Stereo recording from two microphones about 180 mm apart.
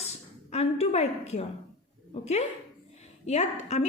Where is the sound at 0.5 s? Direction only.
35° left (ahead or behind).